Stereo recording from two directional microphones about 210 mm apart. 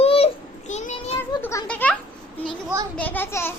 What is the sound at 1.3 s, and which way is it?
A child's voice, 15° left (ahead or behind).